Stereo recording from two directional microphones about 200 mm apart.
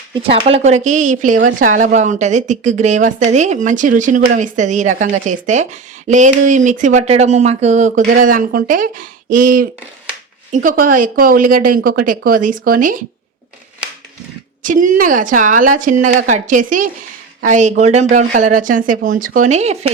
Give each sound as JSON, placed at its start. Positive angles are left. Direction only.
{"t": 0.1, "sound": "a woman's voice", "side_deg": -25}
{"t": 14.6, "sound": "a woman's voice", "side_deg": -40}